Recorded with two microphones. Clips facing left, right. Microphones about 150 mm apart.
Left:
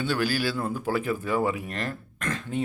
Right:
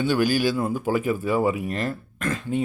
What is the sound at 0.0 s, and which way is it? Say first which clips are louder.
Speech: right 5 dB; 15° right (ahead or behind).